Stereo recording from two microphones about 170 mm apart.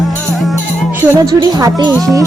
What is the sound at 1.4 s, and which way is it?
Speech, 20° right (ahead or behind).